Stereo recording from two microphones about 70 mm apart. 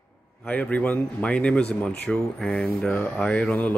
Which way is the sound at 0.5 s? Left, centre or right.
Left.